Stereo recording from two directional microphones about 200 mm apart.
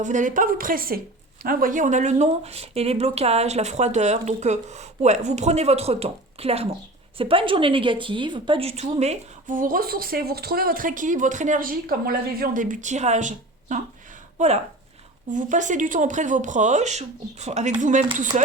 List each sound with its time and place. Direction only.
0.0 s speech: 40° right (ahead or behind)